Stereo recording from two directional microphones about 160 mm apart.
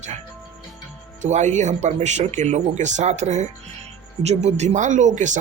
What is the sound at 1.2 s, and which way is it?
Speech, 50° right (ahead or behind).